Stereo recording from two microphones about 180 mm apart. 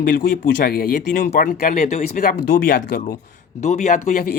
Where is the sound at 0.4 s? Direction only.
55° left (ahead or behind).